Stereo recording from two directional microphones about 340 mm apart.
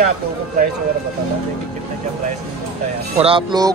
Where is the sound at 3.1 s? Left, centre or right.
Centre.